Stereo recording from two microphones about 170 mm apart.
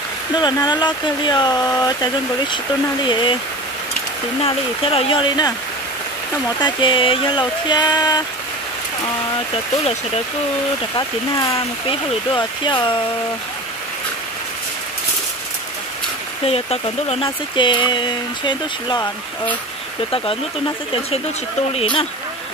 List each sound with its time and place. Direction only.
0.4 s speech: 25° left (ahead or behind)
4.4 s speech: 35° left (ahead or behind)
6.6 s speech: 30° left (ahead or behind)
11.0 s speech: 20° left (ahead or behind)
16.4 s speech: 35° left (ahead or behind)
21.7 s speech: 30° left (ahead or behind)